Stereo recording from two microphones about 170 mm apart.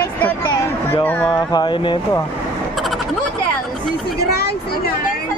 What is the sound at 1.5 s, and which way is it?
Speech, 25° left (ahead or behind).